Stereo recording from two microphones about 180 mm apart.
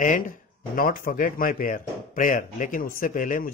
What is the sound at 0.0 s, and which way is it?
Speech, 50° left (ahead or behind).